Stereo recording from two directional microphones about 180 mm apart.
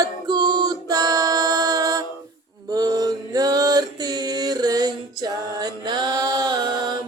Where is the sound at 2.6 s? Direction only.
20° right (ahead or behind).